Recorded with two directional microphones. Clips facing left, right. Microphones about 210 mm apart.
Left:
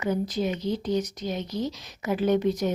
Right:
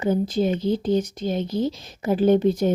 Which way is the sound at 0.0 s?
30° right (ahead or behind).